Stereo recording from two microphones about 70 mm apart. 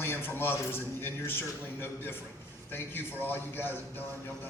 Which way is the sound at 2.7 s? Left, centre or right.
Left.